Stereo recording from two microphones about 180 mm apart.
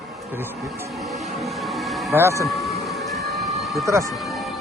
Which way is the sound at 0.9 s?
Centre (ahead or behind).